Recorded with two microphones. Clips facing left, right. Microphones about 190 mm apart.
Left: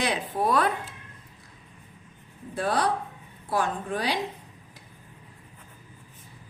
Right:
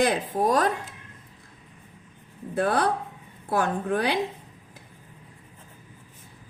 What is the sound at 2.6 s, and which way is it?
A woman's voice, 55° right (ahead or behind).